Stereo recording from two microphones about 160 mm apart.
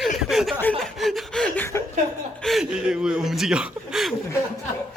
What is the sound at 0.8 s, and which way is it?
Speech, centre (ahead or behind).